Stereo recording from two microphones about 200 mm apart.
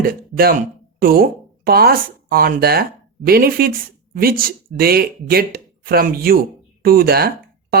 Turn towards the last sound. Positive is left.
turn(degrees=-50)  # may be behind; listen again after turning